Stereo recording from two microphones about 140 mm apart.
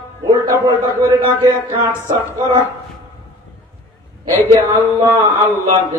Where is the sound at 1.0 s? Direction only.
25° right (ahead or behind).